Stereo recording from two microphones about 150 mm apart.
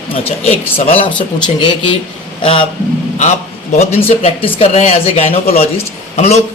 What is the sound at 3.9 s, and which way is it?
A man's voice, 40° left (ahead or behind).